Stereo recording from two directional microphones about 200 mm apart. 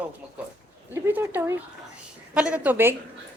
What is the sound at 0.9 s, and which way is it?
A woman's voice, 10° right (ahead or behind).